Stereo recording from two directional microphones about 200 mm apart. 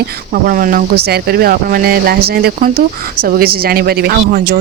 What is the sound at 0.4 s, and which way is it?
Speech, 45° right (ahead or behind).